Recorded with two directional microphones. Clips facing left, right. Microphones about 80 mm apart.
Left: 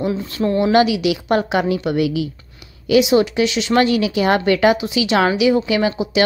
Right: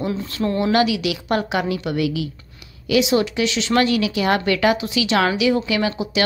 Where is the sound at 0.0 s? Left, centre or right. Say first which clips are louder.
Left 3 dB; centre.